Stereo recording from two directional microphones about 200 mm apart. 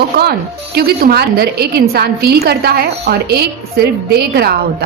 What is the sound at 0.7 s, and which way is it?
A woman's voice, 50° right (ahead or behind).